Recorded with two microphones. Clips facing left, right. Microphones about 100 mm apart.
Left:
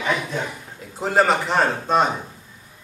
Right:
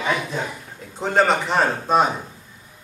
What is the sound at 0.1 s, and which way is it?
Speech, 10° right (ahead or behind).